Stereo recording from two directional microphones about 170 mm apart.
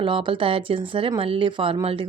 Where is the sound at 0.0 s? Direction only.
30° right (ahead or behind).